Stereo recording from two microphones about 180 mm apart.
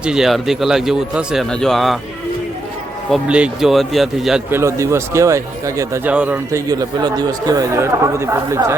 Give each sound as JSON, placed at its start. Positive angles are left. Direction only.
{"t": 0.0, "sound": "speech", "side_deg": -5}
{"t": 3.1, "sound": "speech", "side_deg": -5}
{"t": 4.5, "sound": "speech", "side_deg": -15}
{"t": 6.7, "sound": "speech", "side_deg": -20}